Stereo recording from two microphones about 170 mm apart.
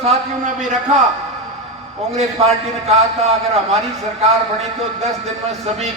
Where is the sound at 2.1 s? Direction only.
40° right (ahead or behind).